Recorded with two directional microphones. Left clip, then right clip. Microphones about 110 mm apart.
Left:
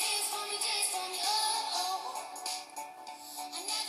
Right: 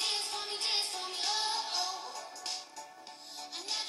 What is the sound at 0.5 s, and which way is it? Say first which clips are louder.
Music: right 2 dB; 45° left (ahead or behind).